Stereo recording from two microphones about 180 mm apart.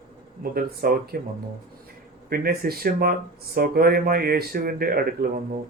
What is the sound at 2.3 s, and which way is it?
Speech, 55° right (ahead or behind).